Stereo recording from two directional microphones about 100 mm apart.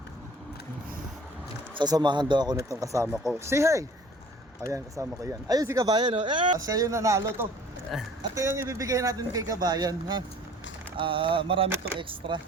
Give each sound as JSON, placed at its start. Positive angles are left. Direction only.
{"t": 1.8, "sound": "speech", "side_deg": -45}
{"t": 5.8, "sound": "speech", "side_deg": -45}
{"t": 6.7, "sound": "speech", "side_deg": -35}
{"t": 10.9, "sound": "speech", "side_deg": -60}